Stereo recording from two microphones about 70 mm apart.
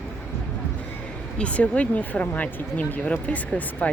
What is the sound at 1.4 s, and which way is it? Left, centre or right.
Speech, centre.